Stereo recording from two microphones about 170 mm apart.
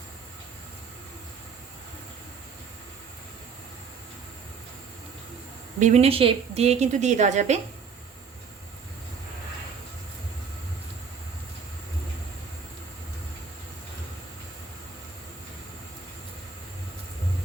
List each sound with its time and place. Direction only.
5.8 s a woman's voice: 40° right (ahead or behind)